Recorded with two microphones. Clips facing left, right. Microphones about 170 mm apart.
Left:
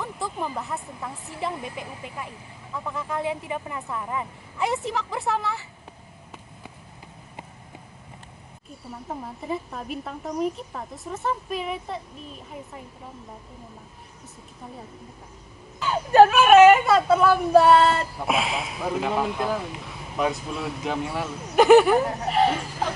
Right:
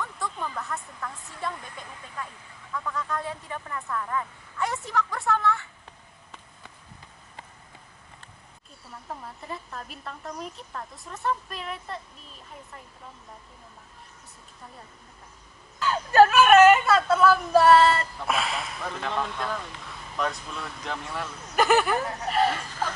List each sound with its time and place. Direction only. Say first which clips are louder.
0.0 s a woman's voice: left 3 dB; 30° left (ahead or behind)
9.2 s a woman's voice: left 7 dB; 5° left (ahead or behind)
15.8 s a woman's voice: left 3 dB; centre (ahead or behind)
17.5 s a woman's voice: left 2 dB; centre (ahead or behind)